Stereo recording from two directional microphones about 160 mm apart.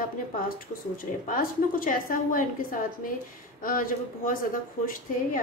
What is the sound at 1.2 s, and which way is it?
A woman's voice, 60° left (ahead or behind).